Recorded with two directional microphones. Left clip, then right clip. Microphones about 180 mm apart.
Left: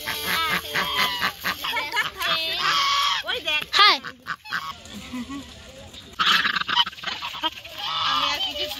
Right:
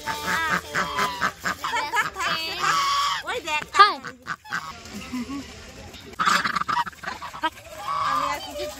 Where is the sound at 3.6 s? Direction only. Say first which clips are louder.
Even; centre (ahead or behind).